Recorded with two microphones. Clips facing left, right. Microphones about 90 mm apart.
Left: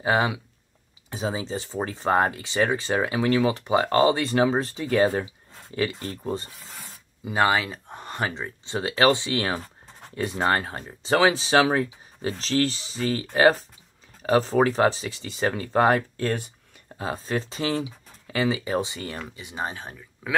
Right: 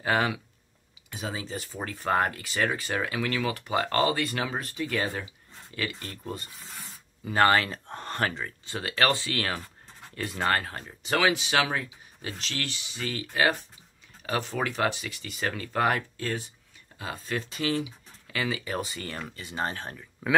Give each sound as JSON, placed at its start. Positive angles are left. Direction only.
{"t": 0.0, "sound": "speech", "side_deg": 20}
{"t": 7.2, "sound": "speech", "side_deg": 10}
{"t": 16.2, "sound": "speech", "side_deg": 55}
{"t": 16.9, "sound": "speech", "side_deg": 35}